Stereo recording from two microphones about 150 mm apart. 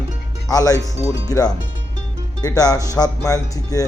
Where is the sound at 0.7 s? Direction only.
20° right (ahead or behind).